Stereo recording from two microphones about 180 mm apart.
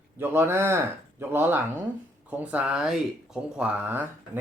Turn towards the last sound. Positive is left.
turn(degrees=-10)  # may be behind; listen again after turning